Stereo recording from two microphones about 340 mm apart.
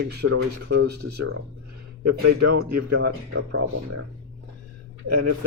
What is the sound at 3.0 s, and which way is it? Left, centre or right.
Speech, right.